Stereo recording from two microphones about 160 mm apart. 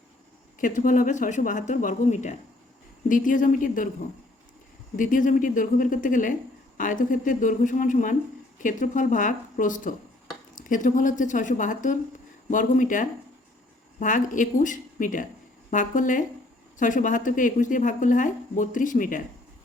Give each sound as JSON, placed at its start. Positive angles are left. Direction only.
{"t": 0.6, "sound": "speech", "side_deg": 55}
{"t": 4.9, "sound": "speech", "side_deg": 55}